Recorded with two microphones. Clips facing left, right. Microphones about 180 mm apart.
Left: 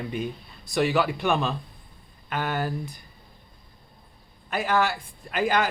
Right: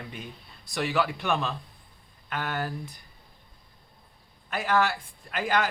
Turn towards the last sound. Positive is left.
turn(degrees=10)  # may be behind; listen again after turning